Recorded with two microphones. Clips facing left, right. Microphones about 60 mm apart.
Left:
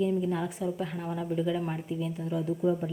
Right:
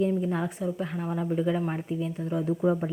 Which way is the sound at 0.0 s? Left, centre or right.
Right.